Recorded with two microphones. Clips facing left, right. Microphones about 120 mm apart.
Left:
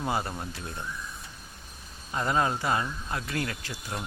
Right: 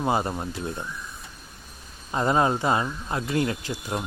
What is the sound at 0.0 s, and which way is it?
Speech, 25° right (ahead or behind).